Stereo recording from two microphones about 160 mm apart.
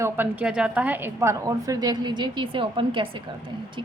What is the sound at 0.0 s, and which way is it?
A woman's voice, 10° right (ahead or behind).